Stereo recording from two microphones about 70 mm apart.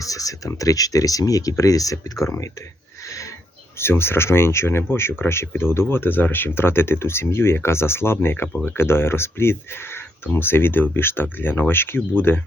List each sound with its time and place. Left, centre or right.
0.0 s speech: left
3.0 s a sound: left
3.8 s speech: left